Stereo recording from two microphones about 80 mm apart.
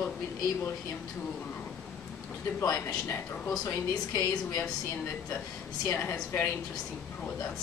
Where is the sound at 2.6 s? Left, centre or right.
Left.